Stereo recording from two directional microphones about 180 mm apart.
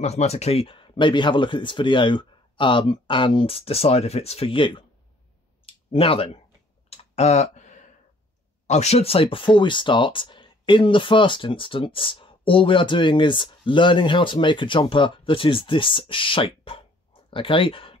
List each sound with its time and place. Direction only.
0.0 s speech: 35° left (ahead or behind)
6.9 s clicking: 35° left (ahead or behind)
8.6 s speech: 40° left (ahead or behind)